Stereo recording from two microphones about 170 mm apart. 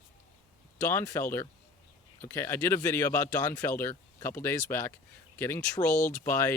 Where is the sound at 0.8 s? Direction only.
15° left (ahead or behind).